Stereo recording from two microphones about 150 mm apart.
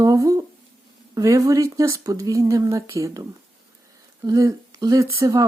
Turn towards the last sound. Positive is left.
turn(degrees=-20)  # may be behind; listen again after turning